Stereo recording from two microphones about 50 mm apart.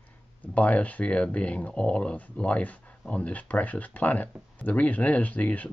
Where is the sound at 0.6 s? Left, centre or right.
Left.